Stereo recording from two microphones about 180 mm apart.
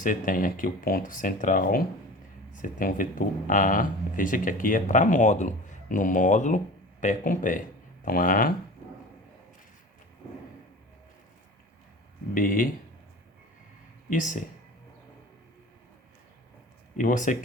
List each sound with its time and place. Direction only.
0.0 s speech: 50° left (ahead or behind)
12.3 s speech: 50° left (ahead or behind)
14.1 s speech: 45° left (ahead or behind)
17.0 s speech: 45° left (ahead or behind)